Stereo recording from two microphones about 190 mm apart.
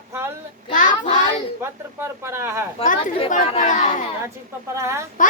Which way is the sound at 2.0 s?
15° right (ahead or behind).